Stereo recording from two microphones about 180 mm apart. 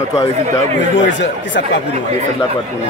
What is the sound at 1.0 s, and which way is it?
Speech, 90° left.